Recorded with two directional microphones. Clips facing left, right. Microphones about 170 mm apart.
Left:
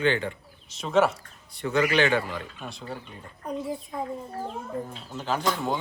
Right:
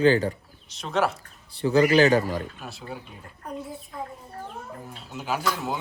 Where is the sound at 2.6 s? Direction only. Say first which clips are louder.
Left 1 dB; 5° right (ahead or behind).